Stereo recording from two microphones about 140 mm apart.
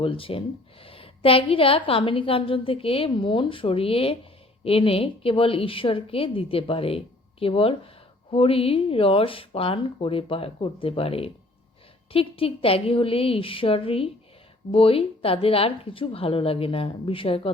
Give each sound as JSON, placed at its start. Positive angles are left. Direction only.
{"t": 0.0, "sound": "a woman's voice", "side_deg": 40}